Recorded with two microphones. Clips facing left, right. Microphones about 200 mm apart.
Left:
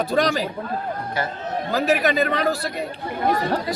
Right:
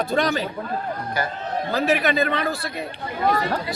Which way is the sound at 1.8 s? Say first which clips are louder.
Left 1 dB; 40° left (ahead or behind).